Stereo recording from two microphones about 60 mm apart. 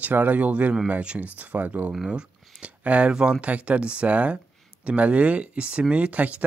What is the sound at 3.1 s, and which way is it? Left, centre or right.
Speech, centre.